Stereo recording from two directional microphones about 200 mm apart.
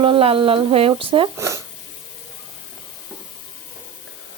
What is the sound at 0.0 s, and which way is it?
Speech, 25° right (ahead or behind).